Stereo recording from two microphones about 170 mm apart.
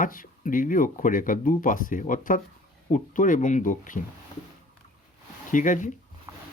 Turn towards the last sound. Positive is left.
turn(degrees=50)  # may be behind; listen again after turning